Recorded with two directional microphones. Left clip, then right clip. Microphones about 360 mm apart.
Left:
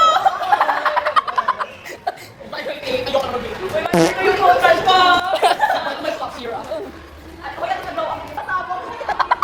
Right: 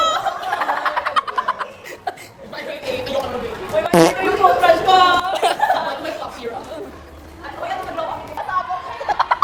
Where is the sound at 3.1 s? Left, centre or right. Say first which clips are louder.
Left 2 dB; centre.